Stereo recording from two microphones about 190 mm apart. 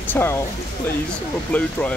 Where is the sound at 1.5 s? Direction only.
5° left (ahead or behind).